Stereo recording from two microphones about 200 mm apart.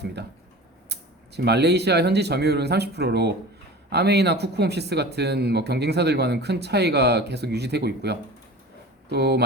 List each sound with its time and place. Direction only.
0.0 s speech: 55° right (ahead or behind)